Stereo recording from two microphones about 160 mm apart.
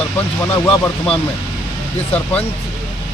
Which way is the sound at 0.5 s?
10° left (ahead or behind).